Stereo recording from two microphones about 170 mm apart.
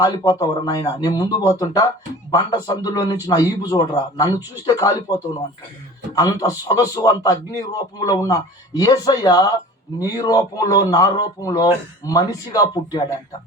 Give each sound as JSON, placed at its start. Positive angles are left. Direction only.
{"t": 0.0, "sound": "a man's voice", "side_deg": 20}